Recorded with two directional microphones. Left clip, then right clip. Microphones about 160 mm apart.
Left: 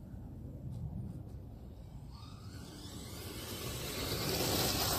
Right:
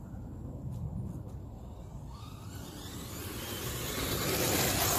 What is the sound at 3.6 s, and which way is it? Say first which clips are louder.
Vehicle: right 4 dB; 15° right (ahead or behind).